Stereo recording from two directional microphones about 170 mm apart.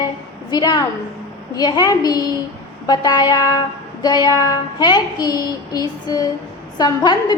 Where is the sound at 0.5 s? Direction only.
25° left (ahead or behind).